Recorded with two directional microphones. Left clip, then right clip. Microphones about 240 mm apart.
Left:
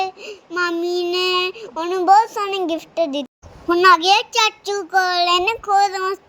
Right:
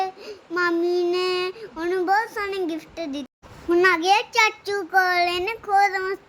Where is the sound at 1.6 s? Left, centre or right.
Centre.